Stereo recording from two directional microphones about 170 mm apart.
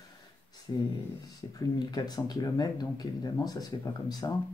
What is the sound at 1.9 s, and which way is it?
Speech, 25° left (ahead or behind).